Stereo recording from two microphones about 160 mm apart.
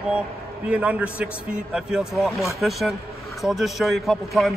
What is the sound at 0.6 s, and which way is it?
A man's voice, 5° right (ahead or behind).